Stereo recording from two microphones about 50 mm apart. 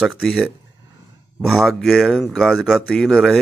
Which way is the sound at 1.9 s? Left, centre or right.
Centre.